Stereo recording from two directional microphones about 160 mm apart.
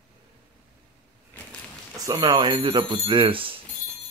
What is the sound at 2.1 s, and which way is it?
Speech, 30° right (ahead or behind).